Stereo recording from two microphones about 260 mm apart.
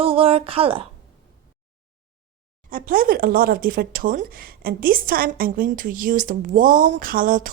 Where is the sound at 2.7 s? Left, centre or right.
Right.